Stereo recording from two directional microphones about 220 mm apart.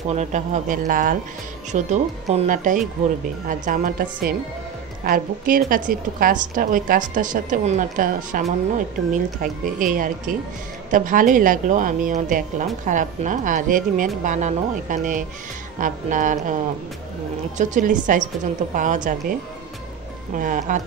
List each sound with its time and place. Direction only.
0.1 s a woman's voice: 30° right (ahead or behind)
17.6 s a woman's voice: 35° right (ahead or behind)
20.3 s a woman's voice: 35° right (ahead or behind)